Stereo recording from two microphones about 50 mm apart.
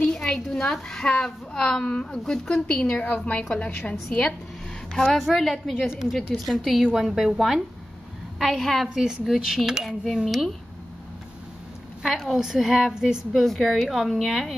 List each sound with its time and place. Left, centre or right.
0.0 s a sound: centre
0.3 s a woman's voice: centre
4.9 s a woman's voice: centre
8.4 s a woman's voice: centre
8.8 s a woman's voice: centre
9.3 s a woman's voice: centre
12.0 s a woman's voice: centre
13.3 s a woman's voice: centre